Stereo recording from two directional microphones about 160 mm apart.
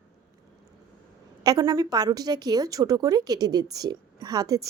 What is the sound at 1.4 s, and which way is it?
A woman's voice, 25° right (ahead or behind).